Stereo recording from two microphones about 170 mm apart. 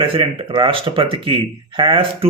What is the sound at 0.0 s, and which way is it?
A man's voice, 30° right (ahead or behind).